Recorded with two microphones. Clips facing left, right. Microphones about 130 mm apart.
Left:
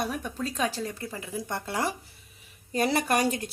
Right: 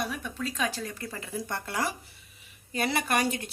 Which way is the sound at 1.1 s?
15° left (ahead or behind).